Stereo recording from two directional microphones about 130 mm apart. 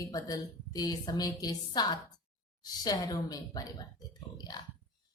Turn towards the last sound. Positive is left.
turn(degrees=30)  # may be behind; listen again after turning